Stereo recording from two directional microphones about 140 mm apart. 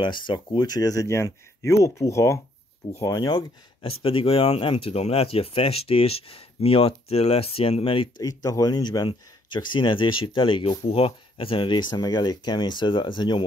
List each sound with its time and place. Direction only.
0.0 s speech: 35° left (ahead or behind)
8.2 s speech: 25° left (ahead or behind)